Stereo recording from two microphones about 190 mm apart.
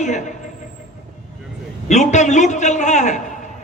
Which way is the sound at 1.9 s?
40° left (ahead or behind).